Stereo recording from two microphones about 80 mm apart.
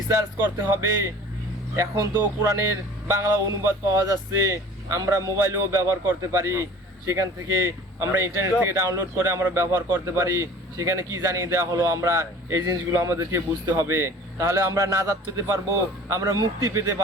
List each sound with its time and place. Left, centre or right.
0.1 s a man's voice: right